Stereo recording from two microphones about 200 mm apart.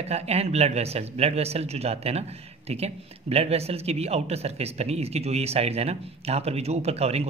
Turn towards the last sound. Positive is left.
turn(degrees=-30)  # may be behind; listen again after turning